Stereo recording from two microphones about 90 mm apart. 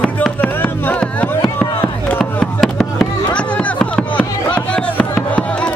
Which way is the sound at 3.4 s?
15° left (ahead or behind).